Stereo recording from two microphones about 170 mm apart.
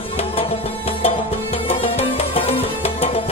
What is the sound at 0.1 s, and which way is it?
Music, 35° left (ahead or behind).